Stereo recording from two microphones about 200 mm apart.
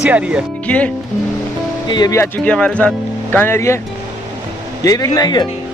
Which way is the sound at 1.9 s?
20° left (ahead or behind).